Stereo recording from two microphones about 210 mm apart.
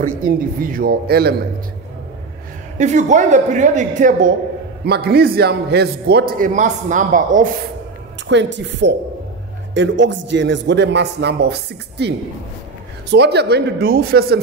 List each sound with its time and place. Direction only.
0.0 s a man's voice: 40° right (ahead or behind)
2.8 s a man's voice: 35° right (ahead or behind)
4.8 s a man's voice: 50° right (ahead or behind)
8.3 s a man's voice: 55° right (ahead or behind)